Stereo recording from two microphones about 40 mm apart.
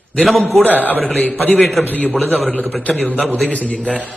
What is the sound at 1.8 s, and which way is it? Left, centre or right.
Speech, left.